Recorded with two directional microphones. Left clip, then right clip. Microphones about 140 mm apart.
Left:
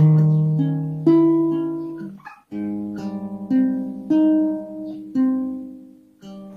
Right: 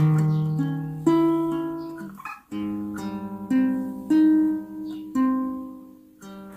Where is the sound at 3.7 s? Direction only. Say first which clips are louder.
Left 2 dB; 15° left (ahead or behind).